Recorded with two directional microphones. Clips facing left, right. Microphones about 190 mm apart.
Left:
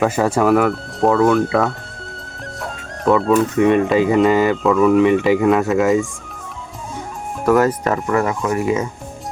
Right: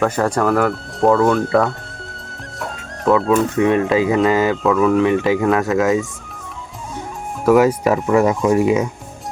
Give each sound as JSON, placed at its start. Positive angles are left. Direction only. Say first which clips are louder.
{"t": 0.0, "sound": "speech", "louder": "left 1 dB", "side_deg": 5}
{"t": 7.4, "sound": "speech", "louder": "right 2 dB", "side_deg": -10}
{"t": 8.2, "sound": "speech", "louder": "right 5 dB", "side_deg": -20}